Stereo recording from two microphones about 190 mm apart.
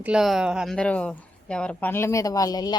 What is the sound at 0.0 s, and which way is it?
A woman's voice, 5° right (ahead or behind).